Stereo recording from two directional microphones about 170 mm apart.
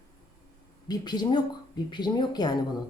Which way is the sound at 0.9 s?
25° left (ahead or behind).